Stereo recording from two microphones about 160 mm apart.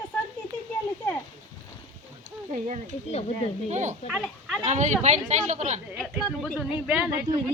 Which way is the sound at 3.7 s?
45° right (ahead or behind).